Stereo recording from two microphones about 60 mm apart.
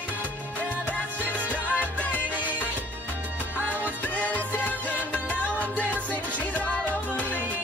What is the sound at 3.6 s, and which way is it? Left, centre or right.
Music, right.